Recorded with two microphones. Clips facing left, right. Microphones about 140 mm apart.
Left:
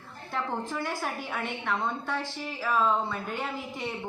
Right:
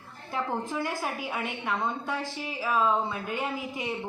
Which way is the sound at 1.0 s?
5° right (ahead or behind).